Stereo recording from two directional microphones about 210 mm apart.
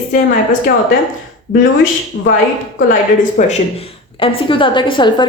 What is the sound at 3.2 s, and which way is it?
Speech, 35° left (ahead or behind).